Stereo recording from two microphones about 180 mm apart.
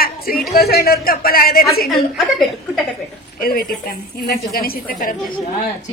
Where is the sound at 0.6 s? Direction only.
55° left (ahead or behind).